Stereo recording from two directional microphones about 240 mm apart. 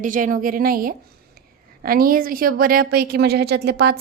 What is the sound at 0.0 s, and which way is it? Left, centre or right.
A woman's voice, right.